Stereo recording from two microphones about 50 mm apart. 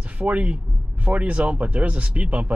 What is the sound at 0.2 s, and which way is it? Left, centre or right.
Speech, right.